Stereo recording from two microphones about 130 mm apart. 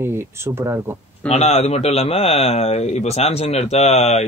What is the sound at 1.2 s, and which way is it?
Speech, 55° left (ahead or behind).